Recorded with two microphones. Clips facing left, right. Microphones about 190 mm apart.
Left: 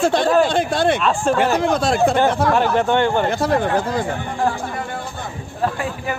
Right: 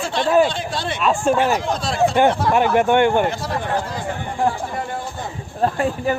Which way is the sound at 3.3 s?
55° left (ahead or behind).